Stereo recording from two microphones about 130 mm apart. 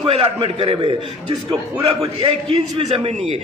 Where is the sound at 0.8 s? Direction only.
35° right (ahead or behind).